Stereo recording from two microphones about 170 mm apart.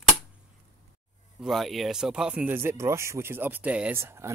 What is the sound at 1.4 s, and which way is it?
Speech, centre (ahead or behind).